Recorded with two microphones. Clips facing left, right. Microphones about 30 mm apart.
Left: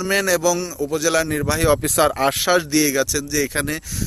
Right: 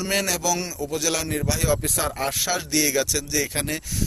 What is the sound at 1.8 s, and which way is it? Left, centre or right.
Speech, left.